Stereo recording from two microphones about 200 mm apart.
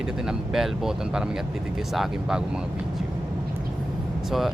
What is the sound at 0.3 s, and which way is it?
Speech, centre (ahead or behind).